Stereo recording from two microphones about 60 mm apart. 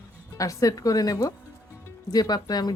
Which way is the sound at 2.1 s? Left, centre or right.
Left.